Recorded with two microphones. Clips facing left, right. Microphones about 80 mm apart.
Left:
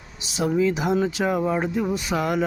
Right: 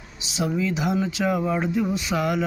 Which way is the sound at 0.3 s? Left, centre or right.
Left.